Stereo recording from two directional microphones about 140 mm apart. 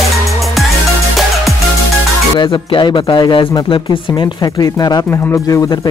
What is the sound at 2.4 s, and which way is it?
Speech, 35° left (ahead or behind).